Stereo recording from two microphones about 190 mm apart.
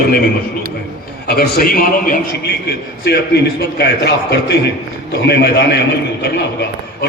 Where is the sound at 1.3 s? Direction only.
55° left (ahead or behind).